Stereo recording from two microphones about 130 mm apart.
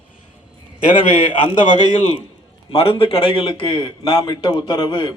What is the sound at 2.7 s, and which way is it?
A man's voice, 45° left (ahead or behind).